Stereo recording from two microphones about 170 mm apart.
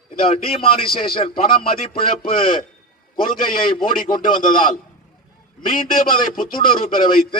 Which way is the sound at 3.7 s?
30° left (ahead or behind).